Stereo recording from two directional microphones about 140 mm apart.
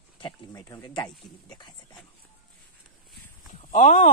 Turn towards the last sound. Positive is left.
turn(degrees=70)  # may be behind; listen again after turning